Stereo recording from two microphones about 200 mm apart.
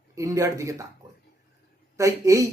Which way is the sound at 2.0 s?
15° right (ahead or behind).